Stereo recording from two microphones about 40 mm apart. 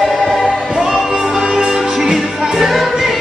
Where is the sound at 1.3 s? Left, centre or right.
Centre.